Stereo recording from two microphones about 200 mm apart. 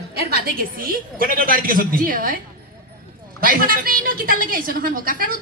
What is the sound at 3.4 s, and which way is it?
A woman's voice, 45° right (ahead or behind).